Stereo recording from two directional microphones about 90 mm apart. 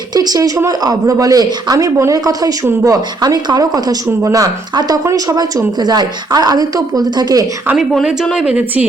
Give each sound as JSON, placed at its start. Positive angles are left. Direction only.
{"t": 0.1, "sound": "a woman's voice", "side_deg": -45}
{"t": 8.2, "sound": "a woman's voice", "side_deg": 0}
{"t": 8.4, "sound": "a woman's voice", "side_deg": -15}